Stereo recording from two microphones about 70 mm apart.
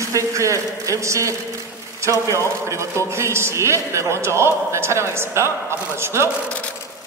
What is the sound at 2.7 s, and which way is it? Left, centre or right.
A man's voice, right.